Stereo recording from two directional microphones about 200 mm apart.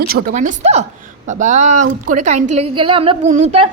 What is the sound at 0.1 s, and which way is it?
A woman's voice, 45° right (ahead or behind).